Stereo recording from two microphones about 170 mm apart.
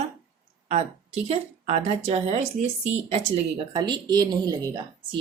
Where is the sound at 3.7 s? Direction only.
25° right (ahead or behind).